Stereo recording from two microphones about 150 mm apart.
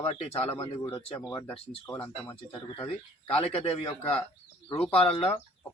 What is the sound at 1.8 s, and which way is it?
Speech, 15° left (ahead or behind).